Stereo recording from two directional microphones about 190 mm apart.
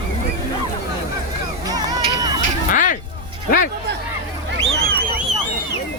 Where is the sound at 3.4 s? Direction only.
45° left (ahead or behind).